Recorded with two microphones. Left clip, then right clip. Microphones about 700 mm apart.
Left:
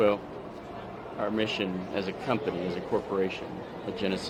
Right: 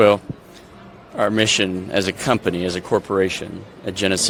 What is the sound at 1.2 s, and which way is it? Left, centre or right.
Speech, right.